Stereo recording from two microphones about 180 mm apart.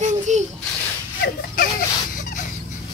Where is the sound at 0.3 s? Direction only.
40° right (ahead or behind).